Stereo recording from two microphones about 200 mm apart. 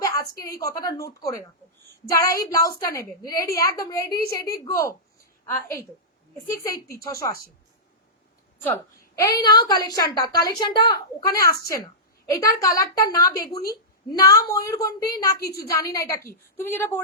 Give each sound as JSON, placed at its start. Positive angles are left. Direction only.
{"t": 0.0, "sound": "a sound", "side_deg": 15}
{"t": 0.5, "sound": "a woman's voice", "side_deg": 15}
{"t": 7.0, "sound": "a woman's voice", "side_deg": 15}
{"t": 9.1, "sound": "a woman's voice", "side_deg": 15}